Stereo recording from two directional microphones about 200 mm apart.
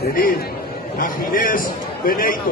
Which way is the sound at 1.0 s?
45° left (ahead or behind).